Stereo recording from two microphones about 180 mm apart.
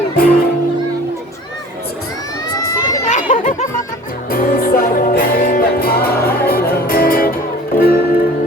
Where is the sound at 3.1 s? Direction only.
40° left (ahead or behind).